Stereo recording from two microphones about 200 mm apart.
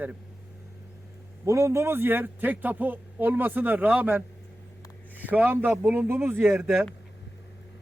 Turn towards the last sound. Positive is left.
turn(degrees=-5)  # may be behind; listen again after turning